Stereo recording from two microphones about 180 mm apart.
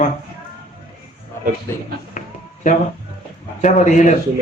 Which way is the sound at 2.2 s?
45° left (ahead or behind).